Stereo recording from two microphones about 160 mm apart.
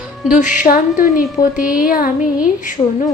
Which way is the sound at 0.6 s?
60° left (ahead or behind).